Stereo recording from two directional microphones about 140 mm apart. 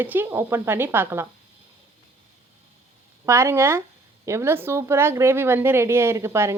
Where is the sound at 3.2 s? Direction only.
20° right (ahead or behind).